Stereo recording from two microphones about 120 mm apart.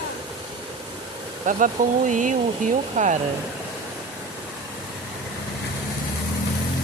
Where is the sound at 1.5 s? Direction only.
90° right.